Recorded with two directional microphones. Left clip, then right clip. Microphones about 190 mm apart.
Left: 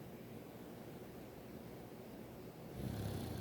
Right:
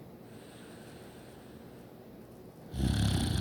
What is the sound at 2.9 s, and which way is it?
Snoring, 50° right (ahead or behind).